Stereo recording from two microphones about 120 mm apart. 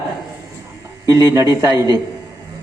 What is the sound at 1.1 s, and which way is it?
Speech, 25° right (ahead or behind).